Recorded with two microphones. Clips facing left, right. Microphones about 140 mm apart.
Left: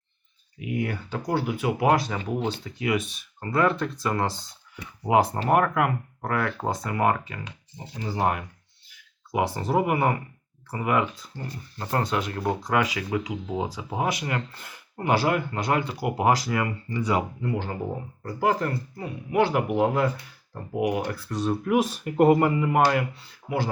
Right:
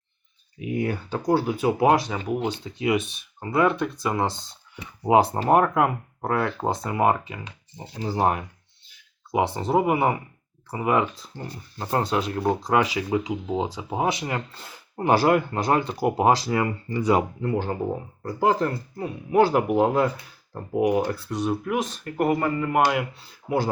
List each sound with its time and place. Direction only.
0.6 s speech: 35° right (ahead or behind); by 2.7 s 10° right (ahead or behind)
2.7 s speech: 25° right (ahead or behind)
5.0 s speech: 25° right (ahead or behind)
7.9 s speech: 30° right (ahead or behind)
15.0 s speech: 45° right (ahead or behind)
16.0 s speech: 25° right (ahead or behind)
17.0 s speech: 45° right (ahead or behind)
18.2 s speech: 30° right (ahead or behind)
21.2 s speech: 15° right (ahead or behind)
21.6 s speech: 5° left (ahead or behind)
22.2 s speech: 20° left (ahead or behind)
22.8 s speech: 15° right (ahead or behind)